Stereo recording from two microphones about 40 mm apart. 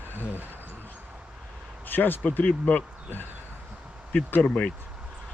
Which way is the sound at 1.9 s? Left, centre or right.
Left.